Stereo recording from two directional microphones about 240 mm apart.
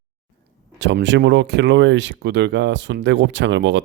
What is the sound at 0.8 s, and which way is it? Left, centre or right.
Speech, right.